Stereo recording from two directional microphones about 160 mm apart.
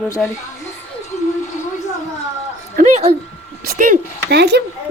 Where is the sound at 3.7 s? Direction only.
60° right (ahead or behind); by 4.6 s 90° right.